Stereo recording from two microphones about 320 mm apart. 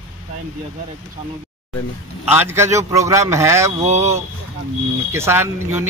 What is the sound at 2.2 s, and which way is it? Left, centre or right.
A man's voice, centre.